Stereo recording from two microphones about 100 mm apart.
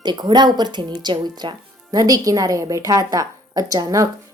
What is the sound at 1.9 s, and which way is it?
A woman's voice, 35° right (ahead or behind).